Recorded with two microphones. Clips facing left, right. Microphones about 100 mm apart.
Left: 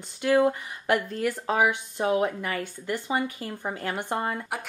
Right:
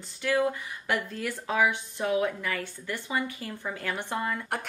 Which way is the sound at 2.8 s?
20° left (ahead or behind).